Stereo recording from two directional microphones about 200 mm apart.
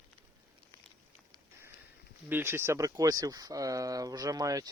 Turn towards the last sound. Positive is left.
turn(degrees=-15)  # may be behind; listen again after turning